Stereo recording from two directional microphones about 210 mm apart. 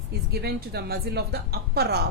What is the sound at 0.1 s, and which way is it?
A woman's voice, 50° right (ahead or behind).